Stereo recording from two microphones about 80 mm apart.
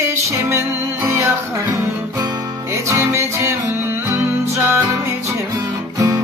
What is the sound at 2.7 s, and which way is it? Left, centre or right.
Music, right.